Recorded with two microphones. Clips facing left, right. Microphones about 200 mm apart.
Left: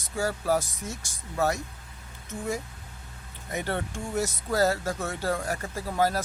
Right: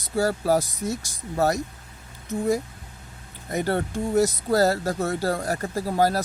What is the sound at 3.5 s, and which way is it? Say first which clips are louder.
Speech: right 6 dB; 40° right (ahead or behind).